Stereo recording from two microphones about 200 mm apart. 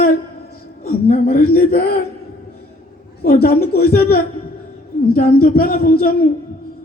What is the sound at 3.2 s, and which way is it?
A man's voice, 50° left (ahead or behind).